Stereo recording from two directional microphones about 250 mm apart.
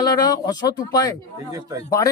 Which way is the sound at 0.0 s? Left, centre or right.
Centre.